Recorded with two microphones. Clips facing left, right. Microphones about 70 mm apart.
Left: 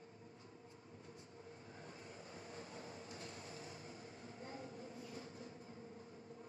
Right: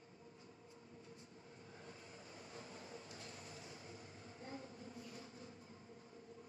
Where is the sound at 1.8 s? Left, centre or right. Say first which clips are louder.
Left 3 dB; left.